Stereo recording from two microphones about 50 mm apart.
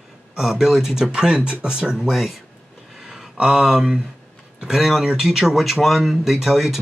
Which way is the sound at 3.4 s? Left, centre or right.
Centre.